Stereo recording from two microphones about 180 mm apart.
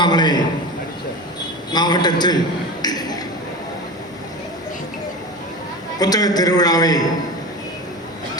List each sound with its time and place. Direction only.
0.0 s a man's voice: 25° left (ahead or behind)
1.7 s a man's voice: 25° left (ahead or behind)
2.8 s finger snapping: 20° left (ahead or behind)
6.0 s a man's voice: 20° left (ahead or behind)